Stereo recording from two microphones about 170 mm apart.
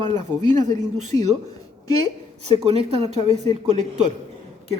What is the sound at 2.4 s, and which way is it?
Speech, 35° right (ahead or behind).